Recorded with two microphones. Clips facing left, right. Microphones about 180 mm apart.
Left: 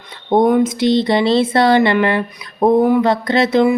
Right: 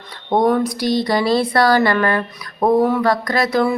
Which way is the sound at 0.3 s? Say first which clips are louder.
Left 3 dB; 25° left (ahead or behind).